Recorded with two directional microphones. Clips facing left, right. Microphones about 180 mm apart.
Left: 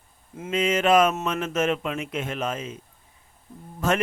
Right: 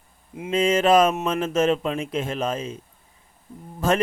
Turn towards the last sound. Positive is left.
turn(degrees=-35)  # may be behind; listen again after turning